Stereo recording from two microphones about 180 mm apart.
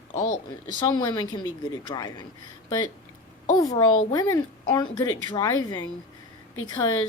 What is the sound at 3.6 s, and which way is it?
Speech, 20° left (ahead or behind).